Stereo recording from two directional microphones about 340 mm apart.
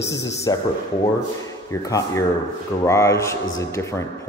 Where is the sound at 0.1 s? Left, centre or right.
Centre.